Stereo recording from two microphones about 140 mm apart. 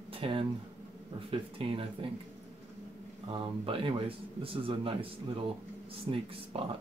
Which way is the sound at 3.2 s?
40° right (ahead or behind).